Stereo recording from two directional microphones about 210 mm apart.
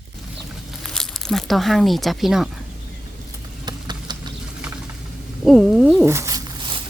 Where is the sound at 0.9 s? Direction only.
Centre (ahead or behind).